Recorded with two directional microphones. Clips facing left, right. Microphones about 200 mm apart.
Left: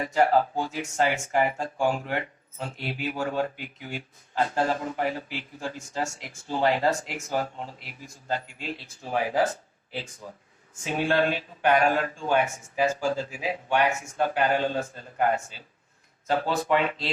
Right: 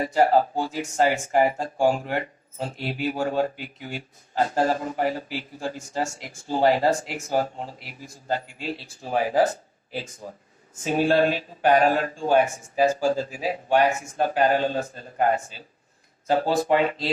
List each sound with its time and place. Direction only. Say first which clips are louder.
0.0 s speech: right 3 dB; 40° right (ahead or behind)